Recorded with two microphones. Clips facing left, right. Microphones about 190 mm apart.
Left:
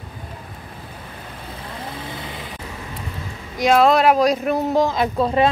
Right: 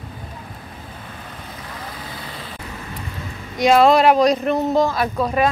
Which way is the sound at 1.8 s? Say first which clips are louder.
Left 4 dB; 20° left (ahead or behind).